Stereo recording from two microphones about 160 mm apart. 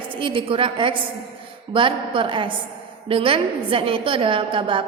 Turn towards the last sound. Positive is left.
turn(degrees=-35)  # may be behind; listen again after turning